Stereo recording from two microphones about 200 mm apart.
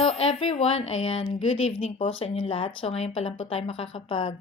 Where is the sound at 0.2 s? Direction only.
30° left (ahead or behind).